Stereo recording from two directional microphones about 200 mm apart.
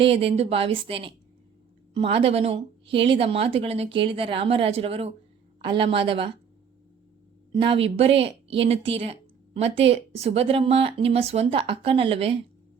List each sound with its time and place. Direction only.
0.0 s speech: 30° right (ahead or behind)
7.5 s speech: 25° right (ahead or behind)